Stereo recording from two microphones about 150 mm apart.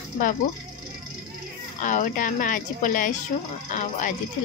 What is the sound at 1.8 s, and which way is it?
A woman's voice, 60° left (ahead or behind).